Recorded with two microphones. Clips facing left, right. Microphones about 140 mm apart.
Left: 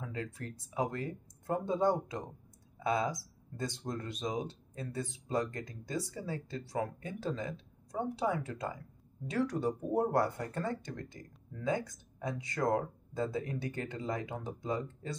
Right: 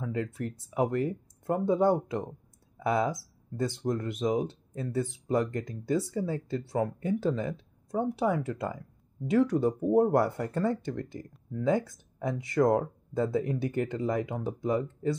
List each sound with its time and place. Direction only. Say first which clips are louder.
0.0 s speech: right 8 dB; 20° right (ahead or behind)
7.0 s speech: right 9 dB; 20° left (ahead or behind)
7.9 s speech: right 6 dB; 25° right (ahead or behind)